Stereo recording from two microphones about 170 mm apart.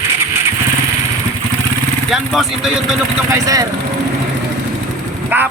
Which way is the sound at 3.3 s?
20° right (ahead or behind).